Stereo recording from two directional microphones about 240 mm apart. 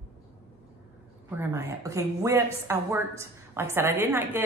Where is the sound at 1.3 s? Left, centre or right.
Centre.